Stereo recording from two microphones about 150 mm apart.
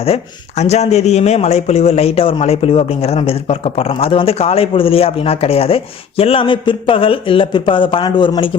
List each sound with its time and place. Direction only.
0.0 s speech: 45° left (ahead or behind)